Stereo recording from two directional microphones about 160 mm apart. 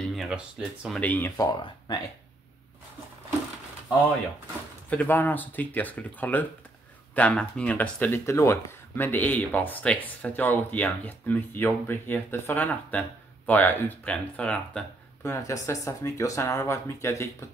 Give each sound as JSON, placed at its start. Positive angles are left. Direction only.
{"t": 0.1, "sound": "a sound", "side_deg": 0}
{"t": 0.8, "sound": "speech", "side_deg": 5}
{"t": 1.5, "sound": "speech", "side_deg": 25}
{"t": 4.8, "sound": "speech", "side_deg": 10}
{"t": 15.2, "sound": "speech", "side_deg": 20}